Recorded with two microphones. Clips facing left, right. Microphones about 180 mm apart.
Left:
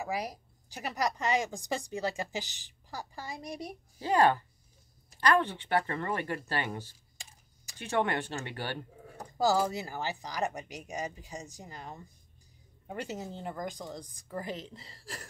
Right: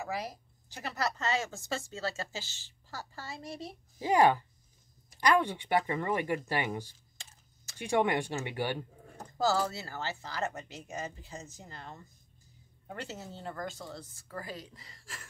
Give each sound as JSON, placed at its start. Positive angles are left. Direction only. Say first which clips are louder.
{"t": 0.0, "sound": "a woman's voice", "louder": "left 2 dB", "side_deg": 15}
{"t": 4.0, "sound": "speech", "louder": "right 1 dB", "side_deg": -10}
{"t": 7.2, "sound": "a sound", "louder": "left 2 dB", "side_deg": 10}
{"t": 7.8, "sound": "speech", "louder": "right 2 dB", "side_deg": -15}
{"t": 9.0, "sound": "a woman's voice", "louder": "left 2 dB", "side_deg": 10}